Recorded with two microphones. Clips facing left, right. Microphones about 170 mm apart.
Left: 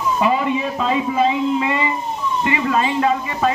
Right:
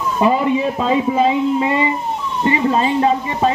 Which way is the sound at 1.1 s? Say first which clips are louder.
Right 2 dB; 30° right (ahead or behind).